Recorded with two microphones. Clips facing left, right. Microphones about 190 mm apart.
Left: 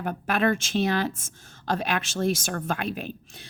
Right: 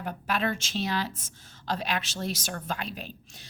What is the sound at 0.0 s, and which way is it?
A woman's voice, 50° left (ahead or behind).